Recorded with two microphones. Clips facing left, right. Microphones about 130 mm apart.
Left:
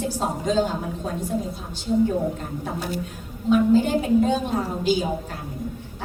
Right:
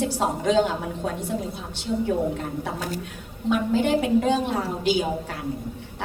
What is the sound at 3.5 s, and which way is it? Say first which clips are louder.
Speech: left 3 dB; 70° right (ahead or behind).